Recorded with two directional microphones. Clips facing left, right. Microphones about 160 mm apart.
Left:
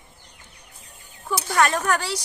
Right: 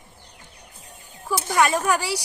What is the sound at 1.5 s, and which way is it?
Speech, 5° right (ahead or behind).